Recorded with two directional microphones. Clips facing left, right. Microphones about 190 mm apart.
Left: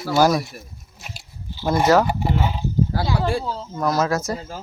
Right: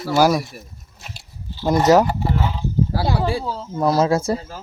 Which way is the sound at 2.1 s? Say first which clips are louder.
Even; 15° left (ahead or behind).